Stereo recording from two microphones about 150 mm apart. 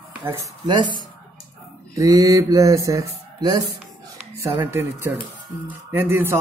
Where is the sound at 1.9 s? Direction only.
25° right (ahead or behind).